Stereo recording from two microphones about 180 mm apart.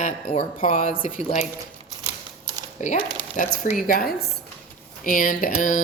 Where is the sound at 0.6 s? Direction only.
45° left (ahead or behind).